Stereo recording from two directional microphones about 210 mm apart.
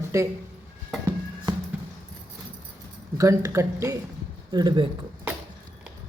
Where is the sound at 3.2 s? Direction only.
15° right (ahead or behind).